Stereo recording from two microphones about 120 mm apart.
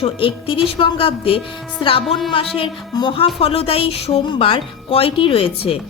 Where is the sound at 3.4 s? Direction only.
55° left (ahead or behind).